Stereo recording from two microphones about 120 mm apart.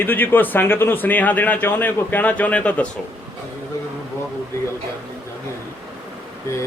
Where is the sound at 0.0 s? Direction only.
15° left (ahead or behind).